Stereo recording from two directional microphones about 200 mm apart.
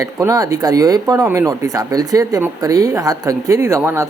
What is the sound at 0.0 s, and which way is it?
Speech, 15° right (ahead or behind).